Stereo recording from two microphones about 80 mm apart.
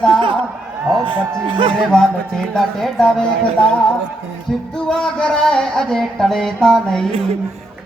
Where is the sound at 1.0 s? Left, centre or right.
Right.